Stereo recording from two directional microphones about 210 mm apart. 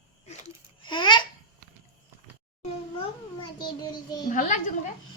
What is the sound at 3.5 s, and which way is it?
Speech, 20° left (ahead or behind).